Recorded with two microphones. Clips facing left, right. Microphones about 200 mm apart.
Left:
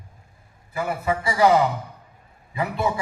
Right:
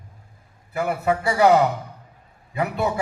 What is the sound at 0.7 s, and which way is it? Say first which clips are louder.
A man's voice: right 3 dB; 65° right (ahead or behind).